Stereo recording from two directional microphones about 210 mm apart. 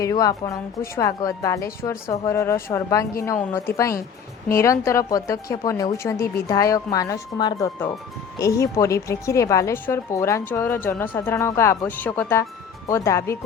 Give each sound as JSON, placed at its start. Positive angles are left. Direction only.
{"t": 0.0, "sound": "a woman's voice", "side_deg": 15}